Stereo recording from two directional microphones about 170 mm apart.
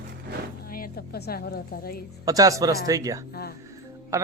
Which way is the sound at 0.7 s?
60° left (ahead or behind).